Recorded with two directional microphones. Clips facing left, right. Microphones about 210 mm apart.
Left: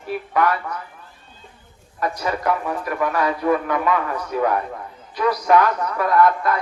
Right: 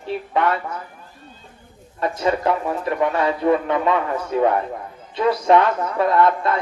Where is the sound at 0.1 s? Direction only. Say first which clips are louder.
Even; 25° right (ahead or behind).